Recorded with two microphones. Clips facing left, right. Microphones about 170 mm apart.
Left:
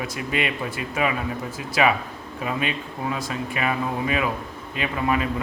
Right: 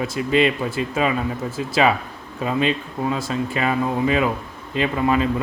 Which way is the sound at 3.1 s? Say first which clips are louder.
Right 4 dB; 30° right (ahead or behind).